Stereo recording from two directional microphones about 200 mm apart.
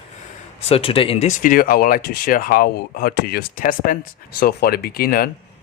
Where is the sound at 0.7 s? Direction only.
30° left (ahead or behind).